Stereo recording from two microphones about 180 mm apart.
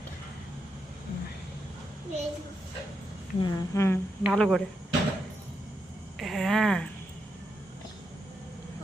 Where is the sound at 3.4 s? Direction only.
20° left (ahead or behind).